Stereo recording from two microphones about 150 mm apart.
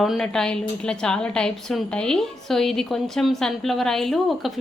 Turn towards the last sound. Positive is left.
turn(degrees=0)  # may be behind; listen again after turning